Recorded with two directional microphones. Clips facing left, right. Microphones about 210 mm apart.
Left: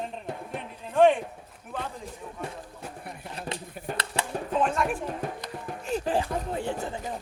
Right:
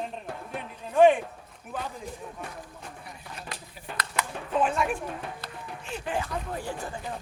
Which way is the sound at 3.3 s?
25° left (ahead or behind).